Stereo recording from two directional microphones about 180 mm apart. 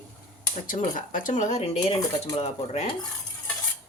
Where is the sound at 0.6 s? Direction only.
50° left (ahead or behind).